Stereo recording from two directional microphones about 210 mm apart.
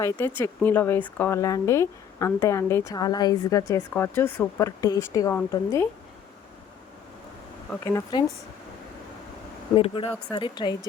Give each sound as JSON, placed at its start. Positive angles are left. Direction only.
{"t": 0.0, "sound": "speech", "side_deg": 10}
{"t": 7.7, "sound": "speech", "side_deg": 15}
{"t": 9.7, "sound": "a woman's voice", "side_deg": 25}